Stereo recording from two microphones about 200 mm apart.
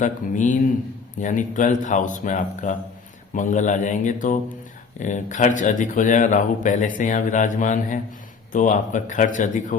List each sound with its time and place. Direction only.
0.0 s speech: 40° left (ahead or behind)